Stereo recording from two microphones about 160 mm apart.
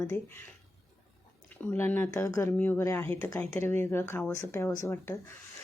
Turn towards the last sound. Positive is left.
turn(degrees=15)  # may be behind; listen again after turning